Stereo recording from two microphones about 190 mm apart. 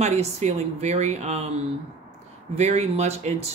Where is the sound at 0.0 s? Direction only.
35° right (ahead or behind).